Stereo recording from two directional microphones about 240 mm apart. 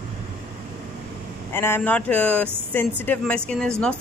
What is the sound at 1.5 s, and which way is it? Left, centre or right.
A woman's voice, centre.